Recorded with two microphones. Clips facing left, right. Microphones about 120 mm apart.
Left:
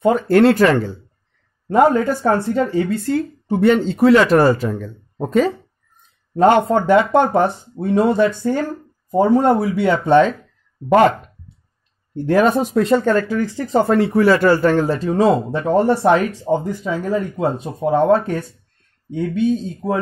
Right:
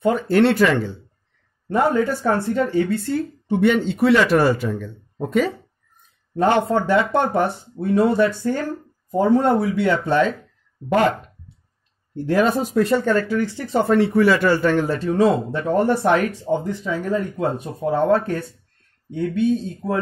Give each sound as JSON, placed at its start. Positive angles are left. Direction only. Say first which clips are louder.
{"t": 0.1, "sound": "speech", "louder": "left 4 dB", "side_deg": 45}
{"t": 6.4, "sound": "speech", "louder": "left 5 dB", "side_deg": 50}
{"t": 7.7, "sound": "speech", "louder": "even", "side_deg": 25}
{"t": 9.8, "sound": "speech", "louder": "left 7 dB", "side_deg": 55}
{"t": 12.3, "sound": "speech", "louder": "left 4 dB", "side_deg": 55}
{"t": 12.8, "sound": "speech", "louder": "left 3 dB", "side_deg": 45}
{"t": 15.9, "sound": "speech", "louder": "left 3 dB", "side_deg": 15}